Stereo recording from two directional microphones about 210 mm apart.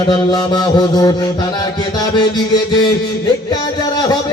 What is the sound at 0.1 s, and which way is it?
Music, 20° left (ahead or behind).